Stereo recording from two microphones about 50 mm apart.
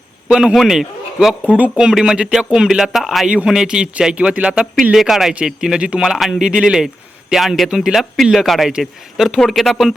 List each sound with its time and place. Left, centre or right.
0.3 s a man's voice: centre
1.5 s speech: right
1.8 s speech: centre
3.2 s a man's voice: centre
4.6 s speech: centre
6.0 s speech: centre
6.4 s a man's voice: centre
9.5 s speech: centre